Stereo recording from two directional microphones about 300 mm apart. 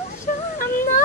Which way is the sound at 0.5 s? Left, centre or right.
Left.